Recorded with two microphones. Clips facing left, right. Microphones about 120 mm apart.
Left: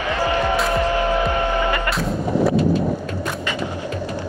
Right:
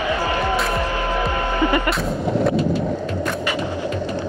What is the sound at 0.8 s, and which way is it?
Music, 20° left (ahead or behind).